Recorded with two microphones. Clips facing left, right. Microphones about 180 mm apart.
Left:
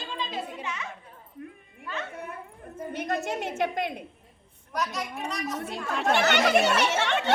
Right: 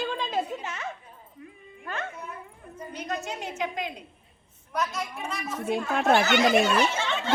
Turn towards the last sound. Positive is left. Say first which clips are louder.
# left 1 dB
turn(degrees=70)  # may be behind; listen again after turning